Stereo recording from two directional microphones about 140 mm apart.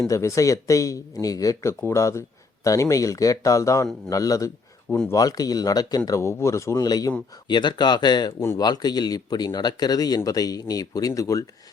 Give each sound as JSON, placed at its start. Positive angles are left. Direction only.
{"t": 0.1, "sound": "speech", "side_deg": 20}
{"t": 8.4, "sound": "speech", "side_deg": 20}
{"t": 8.6, "sound": "speech", "side_deg": 30}